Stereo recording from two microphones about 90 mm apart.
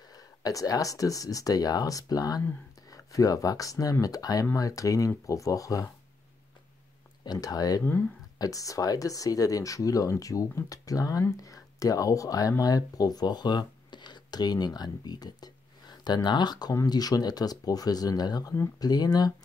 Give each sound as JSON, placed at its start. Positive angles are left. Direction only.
{"t": 0.1, "sound": "speech", "side_deg": 45}
{"t": 7.2, "sound": "speech", "side_deg": 45}
{"t": 7.8, "sound": "speech", "side_deg": 20}
{"t": 8.4, "sound": "speech", "side_deg": 40}